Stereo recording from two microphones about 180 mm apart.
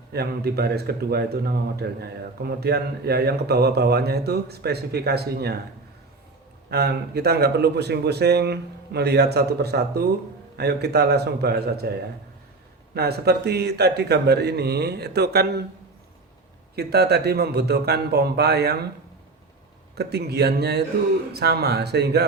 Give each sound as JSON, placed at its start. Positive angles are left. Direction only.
{"t": 0.1, "sound": "speech", "side_deg": -65}
{"t": 6.7, "sound": "speech", "side_deg": -65}
{"t": 16.7, "sound": "speech", "side_deg": -65}
{"t": 20.0, "sound": "speech", "side_deg": -65}